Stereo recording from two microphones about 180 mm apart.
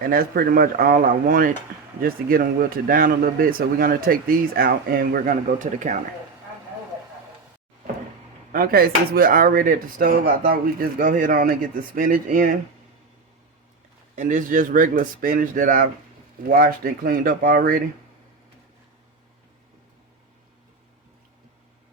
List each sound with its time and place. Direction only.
0.0 s a man's voice: 55° right (ahead or behind)
8.5 s a man's voice: 55° right (ahead or behind)
14.2 s a man's voice: 45° right (ahead or behind)